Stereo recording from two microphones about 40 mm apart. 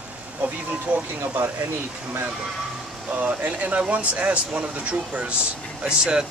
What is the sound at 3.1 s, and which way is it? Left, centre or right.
Speech, right.